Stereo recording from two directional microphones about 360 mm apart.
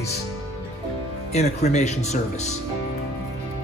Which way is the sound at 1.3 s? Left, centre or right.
Centre.